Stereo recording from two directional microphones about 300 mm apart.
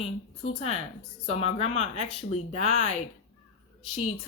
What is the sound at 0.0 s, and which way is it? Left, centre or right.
A woman's voice, centre.